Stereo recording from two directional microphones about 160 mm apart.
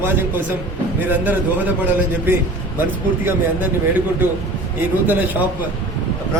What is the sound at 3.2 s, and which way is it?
A man's voice, 10° right (ahead or behind).